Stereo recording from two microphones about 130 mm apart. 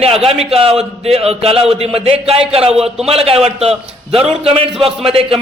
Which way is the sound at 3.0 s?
50° right (ahead or behind).